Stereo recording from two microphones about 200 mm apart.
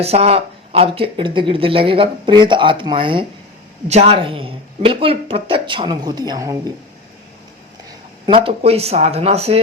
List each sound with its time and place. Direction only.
0.0 s speech: 30° right (ahead or behind)
7.9 s speech: 25° right (ahead or behind)